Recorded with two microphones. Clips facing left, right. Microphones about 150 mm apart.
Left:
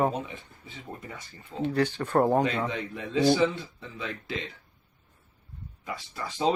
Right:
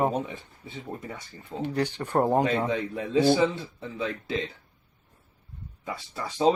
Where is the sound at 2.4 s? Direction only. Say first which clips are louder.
Right 3 dB; 35° right (ahead or behind).